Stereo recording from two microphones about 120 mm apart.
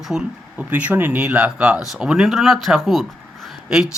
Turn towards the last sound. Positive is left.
turn(degrees=-5)  # may be behind; listen again after turning